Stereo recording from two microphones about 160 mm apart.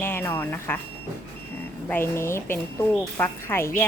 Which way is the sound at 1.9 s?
15° left (ahead or behind).